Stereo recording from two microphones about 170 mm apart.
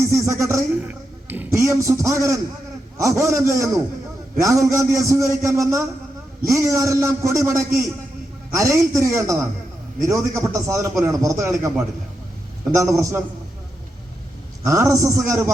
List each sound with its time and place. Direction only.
0.1 s a man's voice: 15° right (ahead or behind)
12.7 s a man's voice: 20° right (ahead or behind)
14.6 s a man's voice: 15° right (ahead or behind)